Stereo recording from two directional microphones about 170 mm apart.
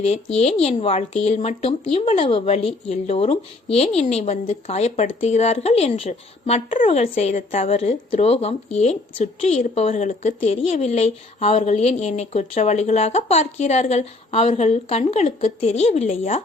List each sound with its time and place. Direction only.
0.0 s speech: 40° left (ahead or behind)